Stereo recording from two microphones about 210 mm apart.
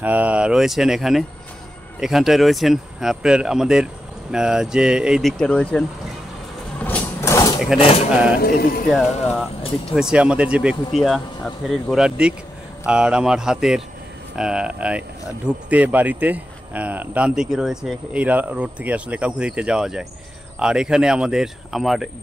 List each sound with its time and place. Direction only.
0.0 s speech: 5° right (ahead or behind)
6.8 s vehicle: 10° left (ahead or behind)
8.1 s speech: 5° right (ahead or behind)
8.4 s speech: 45° left (ahead or behind)
8.8 s speech: centre (ahead or behind)